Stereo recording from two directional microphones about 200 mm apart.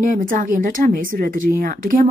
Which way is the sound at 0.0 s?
40° right (ahead or behind).